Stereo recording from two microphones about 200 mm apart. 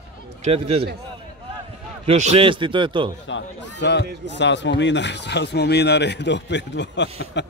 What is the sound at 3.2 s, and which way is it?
Speech, 60° left (ahead or behind).